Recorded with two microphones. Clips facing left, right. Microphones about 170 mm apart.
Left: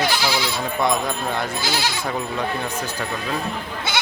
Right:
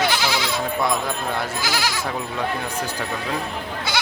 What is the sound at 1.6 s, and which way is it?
Speech, 30° left (ahead or behind).